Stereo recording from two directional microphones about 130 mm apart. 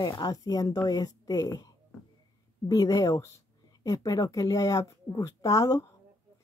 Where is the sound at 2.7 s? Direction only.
30° left (ahead or behind).